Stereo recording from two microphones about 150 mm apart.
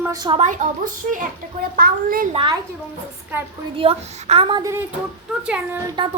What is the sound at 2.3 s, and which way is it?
Speech, 35° right (ahead or behind).